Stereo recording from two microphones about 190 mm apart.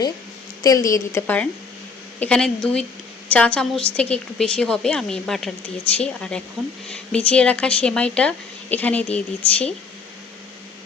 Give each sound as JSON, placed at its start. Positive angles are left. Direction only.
{"t": 0.6, "sound": "a woman's voice", "side_deg": 20}